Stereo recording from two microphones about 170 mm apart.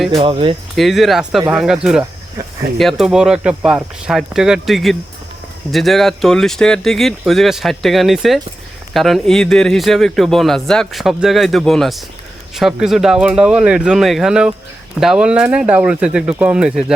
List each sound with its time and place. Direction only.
0.1 s speech: 30° right (ahead or behind)
0.8 s speech: centre (ahead or behind)